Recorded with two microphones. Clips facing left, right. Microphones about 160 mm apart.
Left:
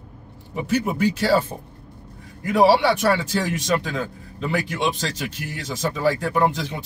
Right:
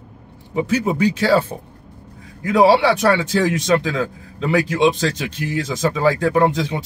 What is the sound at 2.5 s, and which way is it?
A man's voice, 90° right.